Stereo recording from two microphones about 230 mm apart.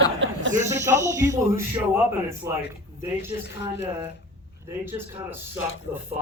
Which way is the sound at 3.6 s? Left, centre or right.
Left.